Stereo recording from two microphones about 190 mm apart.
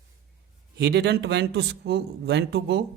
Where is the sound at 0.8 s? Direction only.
60° right (ahead or behind).